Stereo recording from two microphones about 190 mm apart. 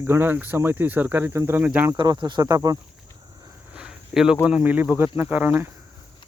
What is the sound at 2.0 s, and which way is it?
Speech, 25° right (ahead or behind).